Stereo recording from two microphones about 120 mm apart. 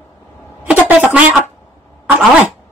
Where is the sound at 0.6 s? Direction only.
10° right (ahead or behind).